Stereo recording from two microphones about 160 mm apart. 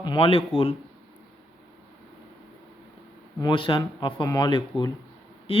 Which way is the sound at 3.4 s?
30° left (ahead or behind).